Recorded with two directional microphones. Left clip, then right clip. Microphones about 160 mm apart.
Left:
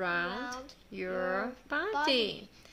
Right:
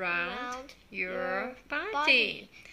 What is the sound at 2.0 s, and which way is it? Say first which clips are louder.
Speech: right 7 dB; 40° left (ahead or behind).